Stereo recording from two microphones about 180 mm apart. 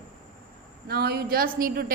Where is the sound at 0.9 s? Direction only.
60° right (ahead or behind).